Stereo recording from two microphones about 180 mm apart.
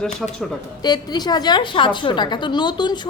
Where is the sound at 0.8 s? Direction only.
25° left (ahead or behind).